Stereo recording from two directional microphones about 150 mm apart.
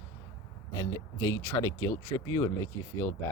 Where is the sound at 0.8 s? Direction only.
20° left (ahead or behind).